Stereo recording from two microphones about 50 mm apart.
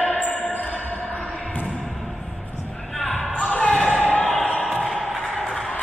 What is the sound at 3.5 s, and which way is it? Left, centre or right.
Basketball bounce, left.